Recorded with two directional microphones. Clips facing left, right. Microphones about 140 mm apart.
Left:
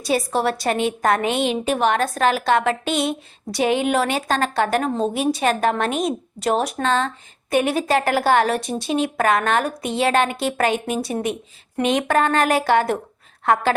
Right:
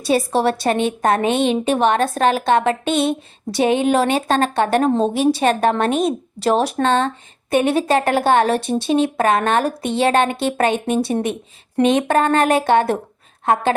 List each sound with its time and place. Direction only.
0.0 s a woman's voice: 25° right (ahead or behind)